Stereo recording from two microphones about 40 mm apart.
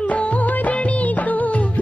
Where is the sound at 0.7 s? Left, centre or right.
Left.